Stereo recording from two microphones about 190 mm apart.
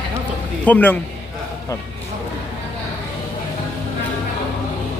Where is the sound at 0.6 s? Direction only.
10° left (ahead or behind).